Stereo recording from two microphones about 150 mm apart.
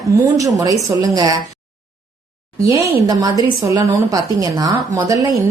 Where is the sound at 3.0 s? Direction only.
25° right (ahead or behind).